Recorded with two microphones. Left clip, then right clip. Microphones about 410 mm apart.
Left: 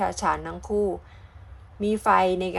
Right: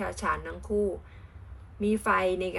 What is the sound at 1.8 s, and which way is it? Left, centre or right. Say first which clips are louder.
Speech: left 5 dB; centre.